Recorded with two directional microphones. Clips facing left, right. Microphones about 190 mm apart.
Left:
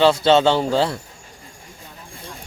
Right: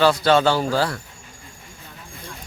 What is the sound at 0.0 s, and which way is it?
Speech, 25° left (ahead or behind).